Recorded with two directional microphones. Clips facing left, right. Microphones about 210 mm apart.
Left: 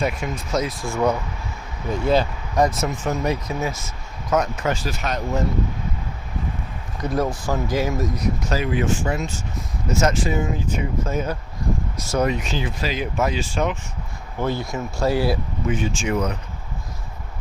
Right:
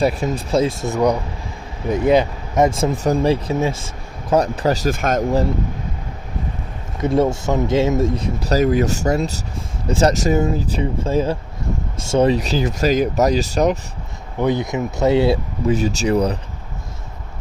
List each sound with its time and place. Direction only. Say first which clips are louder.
0.0 s speech: right 6 dB; 35° right (ahead or behind); by 5.2 s 50° right (ahead or behind)
7.0 s speech: right 6 dB; 25° right (ahead or behind)
14.3 s speech: right 6 dB; 20° right (ahead or behind)
15.6 s speech: right 6 dB; 40° right (ahead or behind)